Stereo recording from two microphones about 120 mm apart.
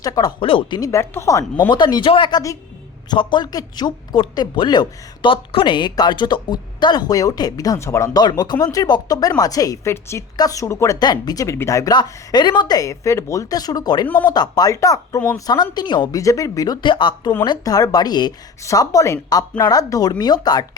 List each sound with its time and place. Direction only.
0.0 s speech: 35° left (ahead or behind)
0.4 s speech: 50° left (ahead or behind)
0.8 s speech: 25° left (ahead or behind)
1.7 s speech: 40° left (ahead or behind)
8.2 s speech: 35° left (ahead or behind)
11.9 s speech: 35° left (ahead or behind)
16.8 s speech: 40° left (ahead or behind)